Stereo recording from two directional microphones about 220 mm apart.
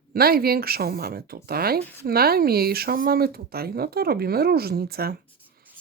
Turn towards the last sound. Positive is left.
turn(degrees=-45)  # may be behind; listen again after turning